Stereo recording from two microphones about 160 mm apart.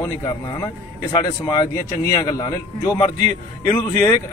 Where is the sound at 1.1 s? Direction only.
25° left (ahead or behind).